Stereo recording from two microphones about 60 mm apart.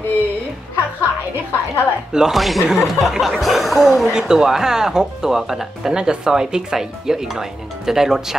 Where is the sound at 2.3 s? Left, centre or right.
Centre.